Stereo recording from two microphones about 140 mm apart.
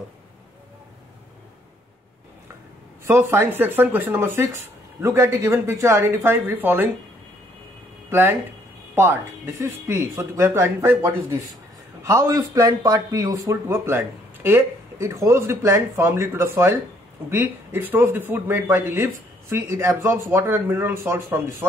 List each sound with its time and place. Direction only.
3.1 s speech: 15° right (ahead or behind)
8.1 s speech: 15° right (ahead or behind)